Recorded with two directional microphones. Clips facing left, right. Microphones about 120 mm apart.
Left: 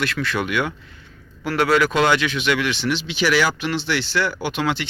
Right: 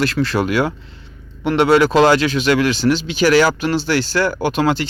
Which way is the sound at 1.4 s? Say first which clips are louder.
Right 5 dB; 25° right (ahead or behind).